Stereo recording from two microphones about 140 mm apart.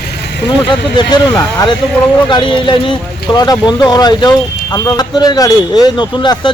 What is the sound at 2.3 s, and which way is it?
Speech, 35° left (ahead or behind).